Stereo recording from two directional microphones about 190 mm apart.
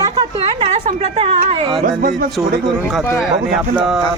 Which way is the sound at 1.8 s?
45° right (ahead or behind).